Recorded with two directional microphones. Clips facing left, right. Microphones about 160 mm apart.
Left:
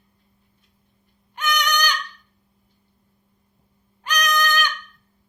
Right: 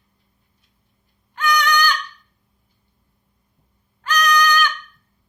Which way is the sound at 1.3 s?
20° left (ahead or behind).